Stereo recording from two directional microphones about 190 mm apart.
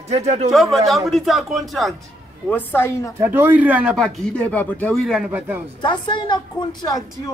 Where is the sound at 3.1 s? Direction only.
10° right (ahead or behind).